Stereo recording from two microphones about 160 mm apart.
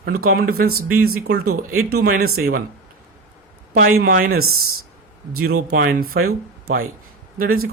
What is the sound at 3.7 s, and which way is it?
Speech, 65° right (ahead or behind).